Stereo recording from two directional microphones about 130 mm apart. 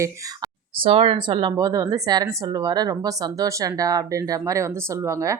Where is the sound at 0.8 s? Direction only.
45° right (ahead or behind).